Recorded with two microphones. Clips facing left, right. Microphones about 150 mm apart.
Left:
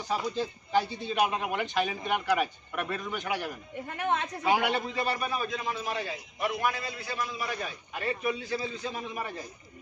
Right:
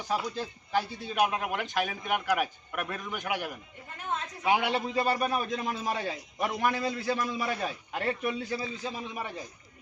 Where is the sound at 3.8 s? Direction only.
70° left (ahead or behind).